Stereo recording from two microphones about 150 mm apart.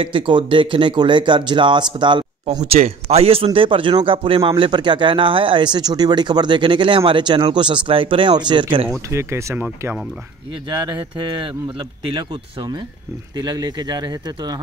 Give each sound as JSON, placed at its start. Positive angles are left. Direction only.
{"t": 0.0, "sound": "speech", "side_deg": -35}
{"t": 2.6, "sound": "speech", "side_deg": -45}
{"t": 9.1, "sound": "speech", "side_deg": -20}
{"t": 11.1, "sound": "speech", "side_deg": -30}